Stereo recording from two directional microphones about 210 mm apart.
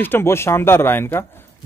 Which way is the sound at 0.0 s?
10° left (ahead or behind).